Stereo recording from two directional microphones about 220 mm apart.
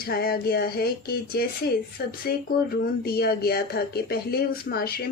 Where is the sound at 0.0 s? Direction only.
45° left (ahead or behind).